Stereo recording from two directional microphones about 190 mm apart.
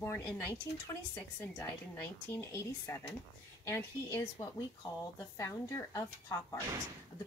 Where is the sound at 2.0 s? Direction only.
15° left (ahead or behind).